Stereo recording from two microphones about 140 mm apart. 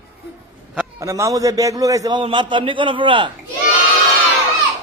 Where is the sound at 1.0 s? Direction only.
20° right (ahead or behind).